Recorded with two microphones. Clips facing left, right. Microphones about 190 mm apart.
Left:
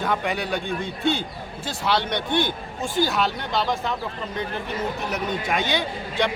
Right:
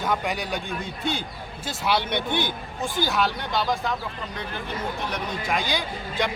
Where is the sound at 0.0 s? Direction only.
Centre (ahead or behind).